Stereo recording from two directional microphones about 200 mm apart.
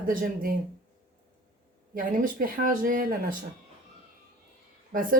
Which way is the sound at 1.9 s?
45° right (ahead or behind).